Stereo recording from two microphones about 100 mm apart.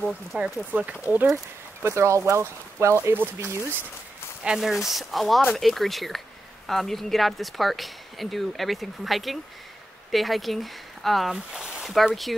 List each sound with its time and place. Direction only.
0.3 s speech: 15° right (ahead or behind)
1.8 s speech: 25° right (ahead or behind)
4.4 s speech: 5° right (ahead or behind)